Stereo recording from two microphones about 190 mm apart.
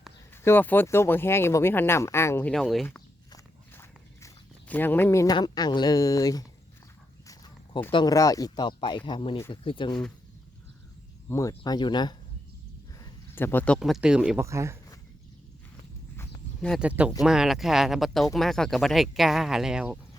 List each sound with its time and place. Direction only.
0.4 s speech: 10° left (ahead or behind)
3.3 s walk: 15° left (ahead or behind)
4.7 s speech: 10° left (ahead or behind)
7.3 s a sound: 15° left (ahead or behind)
7.9 s speech: 20° left (ahead or behind)
11.3 s speech: 15° left (ahead or behind)
12.9 s a sound: 15° left (ahead or behind)
13.7 s speech: centre (ahead or behind)
14.4 s speech: 15° right (ahead or behind)
16.6 s speech: centre (ahead or behind)